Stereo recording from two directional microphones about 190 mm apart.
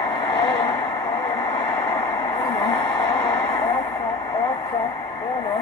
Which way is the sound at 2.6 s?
15° left (ahead or behind).